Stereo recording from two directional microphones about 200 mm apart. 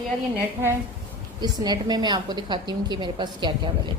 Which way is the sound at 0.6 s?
10° right (ahead or behind).